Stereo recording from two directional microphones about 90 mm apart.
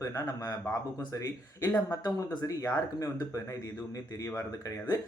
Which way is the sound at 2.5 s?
40° left (ahead or behind).